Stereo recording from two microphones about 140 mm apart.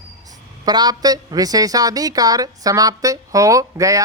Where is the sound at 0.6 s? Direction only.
30° right (ahead or behind).